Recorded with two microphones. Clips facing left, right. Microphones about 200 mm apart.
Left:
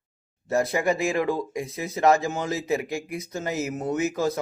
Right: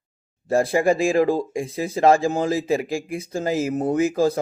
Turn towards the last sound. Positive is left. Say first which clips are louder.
# right 5 dB
turn(degrees=-30)  # may be behind; listen again after turning